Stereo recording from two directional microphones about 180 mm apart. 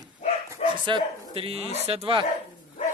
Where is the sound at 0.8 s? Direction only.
30° right (ahead or behind).